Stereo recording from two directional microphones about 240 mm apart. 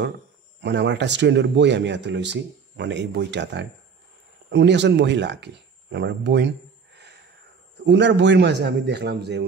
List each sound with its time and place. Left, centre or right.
0.6 s speech: right
7.8 s speech: right